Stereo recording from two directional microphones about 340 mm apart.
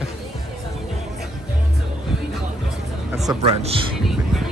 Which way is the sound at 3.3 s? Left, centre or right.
Centre.